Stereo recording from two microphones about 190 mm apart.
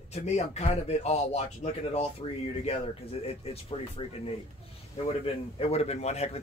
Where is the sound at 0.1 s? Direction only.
35° left (ahead or behind).